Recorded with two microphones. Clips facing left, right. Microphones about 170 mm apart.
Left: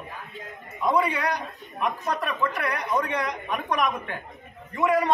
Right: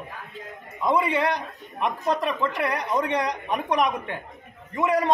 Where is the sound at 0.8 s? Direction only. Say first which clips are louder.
Right 1 dB; 25° right (ahead or behind).